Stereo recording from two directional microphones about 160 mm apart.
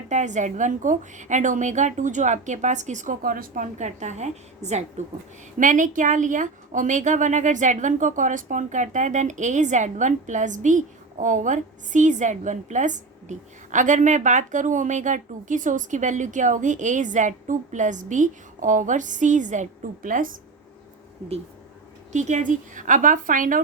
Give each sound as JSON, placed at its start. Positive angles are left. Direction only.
{"t": 0.1, "sound": "a woman's voice", "side_deg": -50}
{"t": 22.1, "sound": "a woman's voice", "side_deg": -50}